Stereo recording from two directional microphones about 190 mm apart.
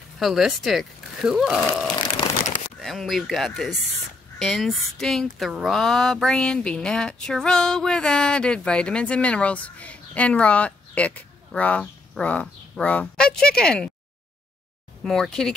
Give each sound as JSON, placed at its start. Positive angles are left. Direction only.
{"t": 0.2, "sound": "speech", "side_deg": 0}
{"t": 2.1, "sound": "crumpling", "side_deg": 30}
{"t": 2.8, "sound": "speech", "side_deg": 0}
{"t": 15.0, "sound": "speech", "side_deg": 5}